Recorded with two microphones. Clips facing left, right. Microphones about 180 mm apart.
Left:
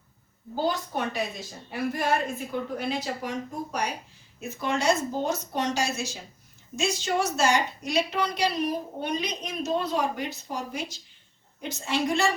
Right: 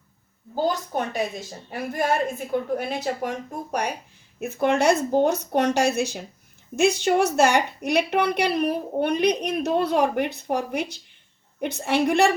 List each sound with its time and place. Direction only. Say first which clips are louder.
0.5 s a woman's voice: right 3 dB; 45° right (ahead or behind)
2.5 s a woman's voice: right 4 dB; 55° right (ahead or behind)